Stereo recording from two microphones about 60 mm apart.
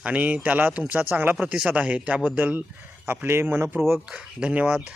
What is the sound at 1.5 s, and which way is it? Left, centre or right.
Speech, centre.